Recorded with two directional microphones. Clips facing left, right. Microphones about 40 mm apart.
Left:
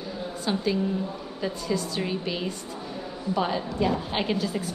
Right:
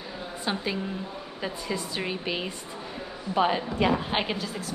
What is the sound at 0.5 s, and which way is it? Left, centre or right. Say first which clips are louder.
A woman's voice: left 4 dB; centre.